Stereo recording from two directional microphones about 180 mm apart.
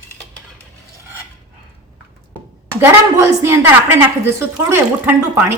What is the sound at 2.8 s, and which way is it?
A woman's voice, 15° right (ahead or behind).